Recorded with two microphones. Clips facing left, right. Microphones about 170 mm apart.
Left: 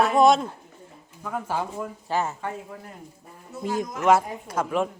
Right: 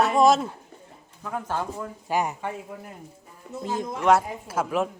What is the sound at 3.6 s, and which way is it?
Speech, 25° right (ahead or behind).